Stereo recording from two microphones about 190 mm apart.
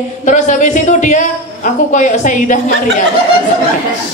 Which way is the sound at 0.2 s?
40° left (ahead or behind).